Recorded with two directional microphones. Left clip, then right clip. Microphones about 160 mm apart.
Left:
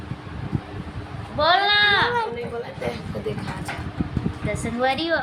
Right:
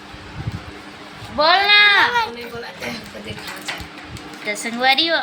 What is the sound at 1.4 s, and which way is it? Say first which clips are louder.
Sheep: right 5 dB; 25° right (ahead or behind).